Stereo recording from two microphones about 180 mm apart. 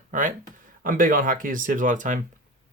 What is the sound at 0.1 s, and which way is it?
Speech, 45° right (ahead or behind).